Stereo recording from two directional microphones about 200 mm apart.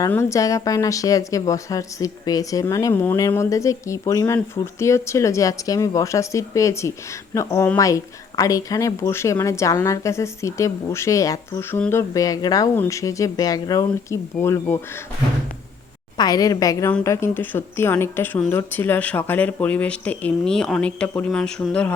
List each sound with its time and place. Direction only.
0.0 s speech: 15° left (ahead or behind)
16.1 s speech: 20° left (ahead or behind)